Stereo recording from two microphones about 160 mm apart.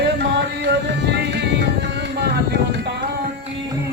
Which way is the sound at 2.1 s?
90° right.